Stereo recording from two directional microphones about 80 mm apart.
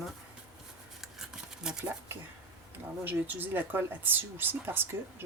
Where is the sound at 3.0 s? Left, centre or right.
Right.